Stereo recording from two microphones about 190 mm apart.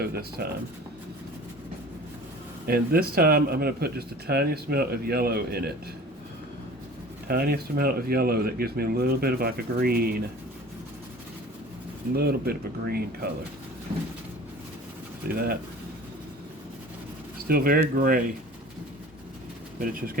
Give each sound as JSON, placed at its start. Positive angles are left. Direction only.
{"t": 0.0, "sound": "speech", "side_deg": -55}
{"t": 2.6, "sound": "speech", "side_deg": -55}
{"t": 7.3, "sound": "speech", "side_deg": -55}
{"t": 12.1, "sound": "speech", "side_deg": -55}
{"t": 15.3, "sound": "speech", "side_deg": -50}
{"t": 17.5, "sound": "speech", "side_deg": -50}
{"t": 19.8, "sound": "speech", "side_deg": -50}